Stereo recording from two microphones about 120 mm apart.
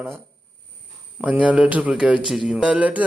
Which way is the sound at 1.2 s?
10° right (ahead or behind).